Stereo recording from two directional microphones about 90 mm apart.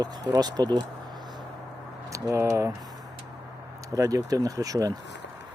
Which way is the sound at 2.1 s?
35° right (ahead or behind).